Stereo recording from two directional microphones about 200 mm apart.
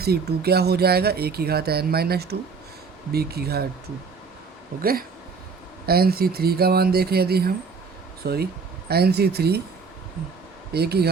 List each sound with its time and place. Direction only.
0.0 s speech: 50° right (ahead or behind)
4.8 s speech: 50° right (ahead or behind)
10.7 s speech: 55° right (ahead or behind)